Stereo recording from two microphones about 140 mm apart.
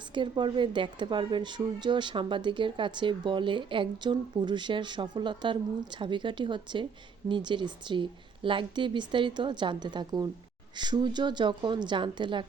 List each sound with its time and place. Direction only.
0.1 s speech: 35° right (ahead or behind)